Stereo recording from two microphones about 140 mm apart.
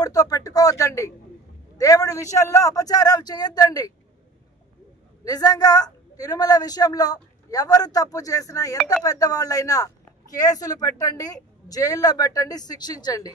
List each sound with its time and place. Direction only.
0.0 s a woman's voice: 25° left (ahead or behind)
5.2 s a woman's voice: 25° left (ahead or behind)